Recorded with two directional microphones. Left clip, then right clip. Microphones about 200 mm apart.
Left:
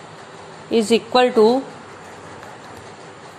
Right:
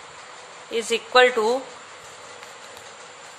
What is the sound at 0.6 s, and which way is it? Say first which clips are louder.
Speech: left 8 dB; 10° left (ahead or behind).